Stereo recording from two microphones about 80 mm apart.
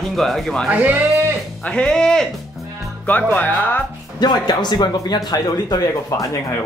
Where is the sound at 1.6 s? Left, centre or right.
Centre.